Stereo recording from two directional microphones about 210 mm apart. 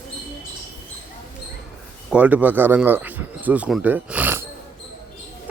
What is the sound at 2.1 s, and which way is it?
Speech, 5° right (ahead or behind).